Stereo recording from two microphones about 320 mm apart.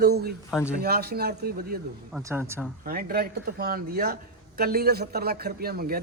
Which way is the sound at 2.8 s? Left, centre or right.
Right.